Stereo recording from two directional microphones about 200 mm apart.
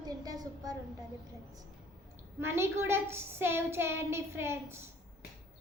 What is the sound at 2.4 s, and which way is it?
A child's voice, 10° right (ahead or behind).